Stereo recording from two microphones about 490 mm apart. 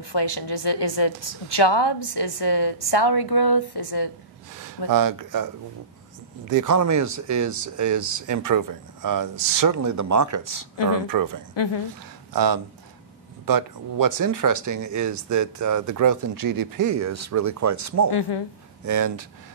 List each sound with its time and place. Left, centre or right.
0.0 s a woman's voice: left
4.9 s speech: right
10.8 s a woman's voice: left
11.1 s speech: right
11.5 s speech: left
12.3 s speech: right